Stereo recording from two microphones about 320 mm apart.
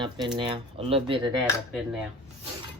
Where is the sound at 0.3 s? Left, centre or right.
Centre.